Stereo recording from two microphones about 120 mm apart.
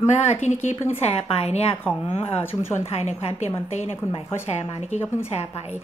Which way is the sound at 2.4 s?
20° left (ahead or behind).